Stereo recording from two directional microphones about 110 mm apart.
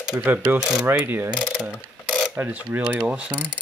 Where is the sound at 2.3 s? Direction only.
20° right (ahead or behind).